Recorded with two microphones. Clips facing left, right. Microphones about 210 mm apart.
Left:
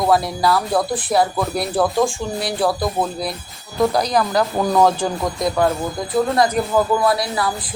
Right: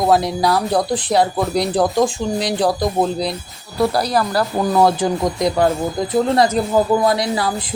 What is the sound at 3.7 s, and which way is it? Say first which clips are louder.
Speech: even; 5° right (ahead or behind).